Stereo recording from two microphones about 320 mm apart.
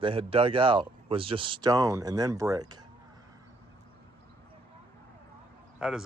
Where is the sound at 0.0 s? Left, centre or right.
Centre.